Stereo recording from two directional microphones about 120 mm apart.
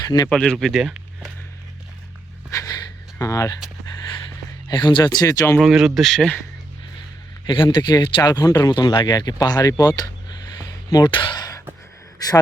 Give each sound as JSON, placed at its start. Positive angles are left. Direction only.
{"t": 0.0, "sound": "speech", "side_deg": 30}
{"t": 0.3, "sound": "speech", "side_deg": 5}
{"t": 2.5, "sound": "a sound", "side_deg": 30}
{"t": 4.7, "sound": "speech", "side_deg": 40}
{"t": 5.5, "sound": "speech", "side_deg": -5}
{"t": 7.4, "sound": "speech", "side_deg": 40}